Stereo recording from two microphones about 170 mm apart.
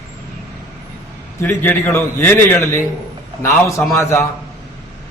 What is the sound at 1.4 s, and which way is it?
A man's voice, 15° left (ahead or behind).